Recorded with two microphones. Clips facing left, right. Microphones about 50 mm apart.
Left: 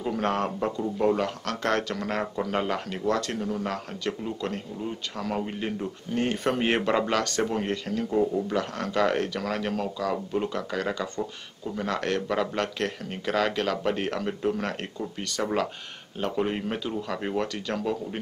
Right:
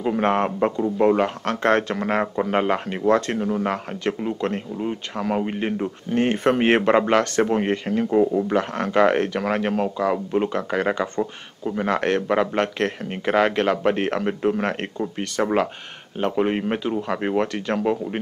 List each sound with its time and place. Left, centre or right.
0.0 s a man's voice: right